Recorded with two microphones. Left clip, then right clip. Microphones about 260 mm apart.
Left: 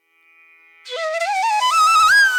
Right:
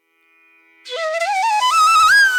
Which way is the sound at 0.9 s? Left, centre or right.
Centre.